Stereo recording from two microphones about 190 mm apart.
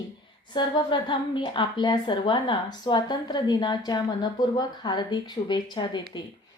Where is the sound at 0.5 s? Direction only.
25° left (ahead or behind).